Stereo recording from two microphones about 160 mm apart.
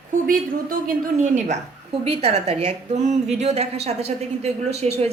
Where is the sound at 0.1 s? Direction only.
60° right (ahead or behind).